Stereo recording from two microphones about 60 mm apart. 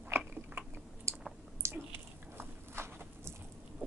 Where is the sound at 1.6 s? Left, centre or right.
Right.